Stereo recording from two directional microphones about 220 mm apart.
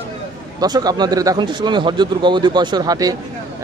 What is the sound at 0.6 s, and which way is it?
Speech, 15° right (ahead or behind).